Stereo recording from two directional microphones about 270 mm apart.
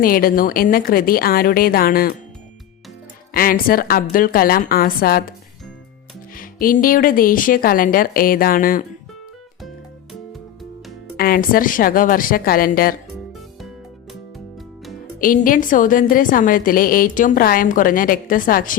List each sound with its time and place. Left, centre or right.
0.0 s a woman's voice: left
3.3 s a woman's voice: left
6.3 s a woman's voice: left
11.2 s a woman's voice: left
15.2 s a woman's voice: left